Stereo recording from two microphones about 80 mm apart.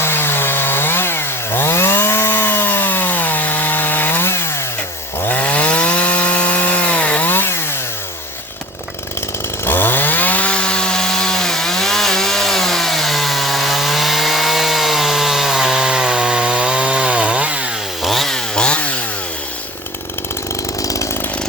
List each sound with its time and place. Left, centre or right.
0.0 s chainsaw: left
9.6 s chainsaw: left; by 17.7 s centre
18.0 s chainsaw: centre
20.8 s chainsaw: left